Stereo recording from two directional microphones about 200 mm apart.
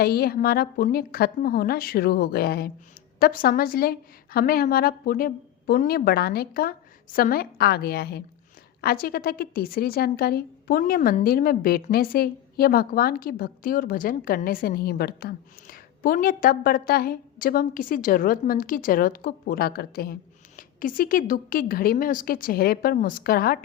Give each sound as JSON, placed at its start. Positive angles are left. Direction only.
{"t": 0.0, "sound": "a woman's voice", "side_deg": 50}